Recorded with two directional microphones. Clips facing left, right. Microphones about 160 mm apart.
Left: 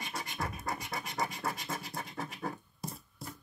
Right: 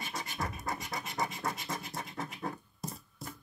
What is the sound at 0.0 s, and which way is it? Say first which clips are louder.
Scratch: even; centre (ahead or behind).